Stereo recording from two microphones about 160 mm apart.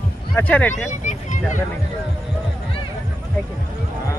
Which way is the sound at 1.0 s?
50° left (ahead or behind).